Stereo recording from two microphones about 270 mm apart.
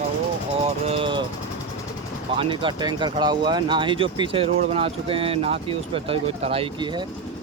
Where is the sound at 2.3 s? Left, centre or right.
Centre.